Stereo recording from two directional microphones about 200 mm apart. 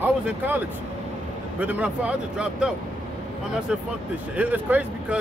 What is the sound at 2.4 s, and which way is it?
Speech, 5° right (ahead or behind).